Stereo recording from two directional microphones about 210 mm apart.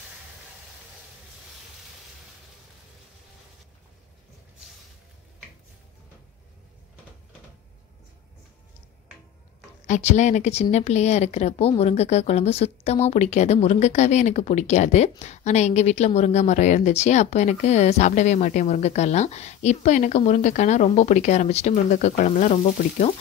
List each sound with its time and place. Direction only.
9.8 s speech: 35° left (ahead or behind)